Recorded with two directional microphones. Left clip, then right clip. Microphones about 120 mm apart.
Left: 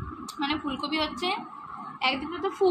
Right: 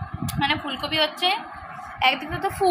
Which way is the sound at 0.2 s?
20° right (ahead or behind).